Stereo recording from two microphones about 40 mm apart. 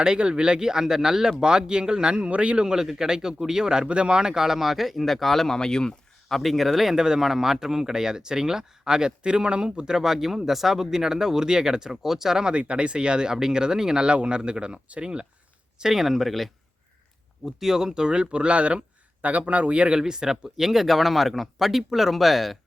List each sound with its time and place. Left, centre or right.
0.0 s a man's voice: right
2.6 s speech: centre
5.5 s speech: centre
6.2 s speech: centre
6.9 s speech: centre
12.5 s speech: right
14.1 s speech: right
15.8 s speech: centre
17.4 s a man's voice: centre; by 20.0 s right
20.0 s speech: centre